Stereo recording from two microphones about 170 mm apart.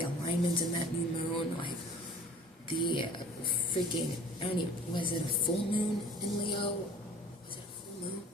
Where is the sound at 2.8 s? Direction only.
30° left (ahead or behind).